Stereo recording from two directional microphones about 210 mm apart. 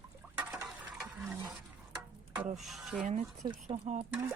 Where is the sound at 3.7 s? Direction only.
30° right (ahead or behind).